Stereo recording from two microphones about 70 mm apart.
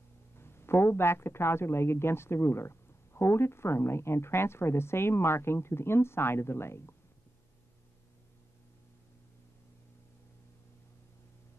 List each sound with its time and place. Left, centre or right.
0.4 s speech: left